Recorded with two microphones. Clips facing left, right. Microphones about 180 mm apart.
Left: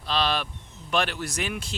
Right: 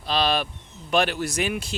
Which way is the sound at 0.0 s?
10° right (ahead or behind).